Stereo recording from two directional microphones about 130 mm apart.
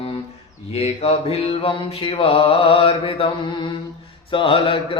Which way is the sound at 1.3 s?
45° left (ahead or behind).